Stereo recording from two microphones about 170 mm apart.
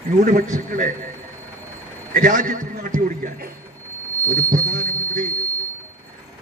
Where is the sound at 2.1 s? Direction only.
50° right (ahead or behind).